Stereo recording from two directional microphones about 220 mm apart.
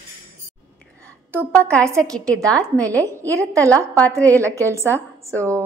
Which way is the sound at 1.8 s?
15° right (ahead or behind).